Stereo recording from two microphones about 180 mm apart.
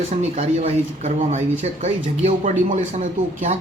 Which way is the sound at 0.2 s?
35° right (ahead or behind).